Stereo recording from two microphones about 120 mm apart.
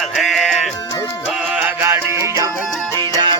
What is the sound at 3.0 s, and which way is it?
Music, 40° right (ahead or behind).